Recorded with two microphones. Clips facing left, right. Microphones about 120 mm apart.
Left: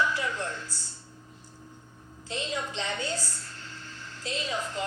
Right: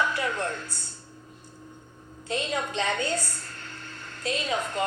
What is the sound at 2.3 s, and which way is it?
A woman's voice, 60° right (ahead or behind).